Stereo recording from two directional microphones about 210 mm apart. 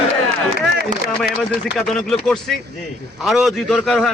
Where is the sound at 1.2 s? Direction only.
Centre (ahead or behind).